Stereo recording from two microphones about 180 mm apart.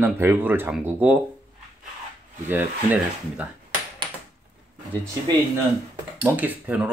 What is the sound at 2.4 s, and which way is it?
Speech, 10° right (ahead or behind).